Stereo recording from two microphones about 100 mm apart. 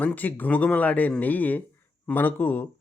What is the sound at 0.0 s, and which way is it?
Speech, 15° left (ahead or behind).